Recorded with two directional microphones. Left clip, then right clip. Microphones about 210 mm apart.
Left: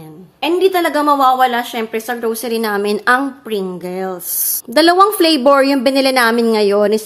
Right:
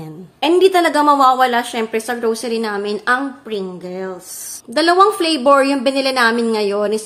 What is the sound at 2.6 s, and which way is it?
A woman's voice, 25° left (ahead or behind).